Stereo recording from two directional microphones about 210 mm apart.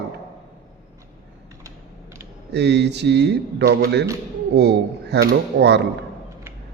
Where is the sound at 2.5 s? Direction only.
55° right (ahead or behind).